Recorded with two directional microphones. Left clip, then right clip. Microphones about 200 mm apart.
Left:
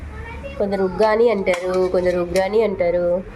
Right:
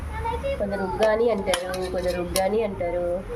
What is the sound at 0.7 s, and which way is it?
Speech, 45° left (ahead or behind).